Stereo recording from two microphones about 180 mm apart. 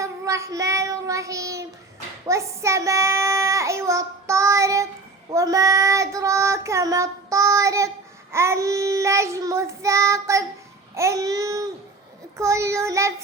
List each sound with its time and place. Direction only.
0.0 s child singing: 15° right (ahead or behind)
10.9 s babbling: 15° right (ahead or behind)
12.4 s child singing: 15° right (ahead or behind)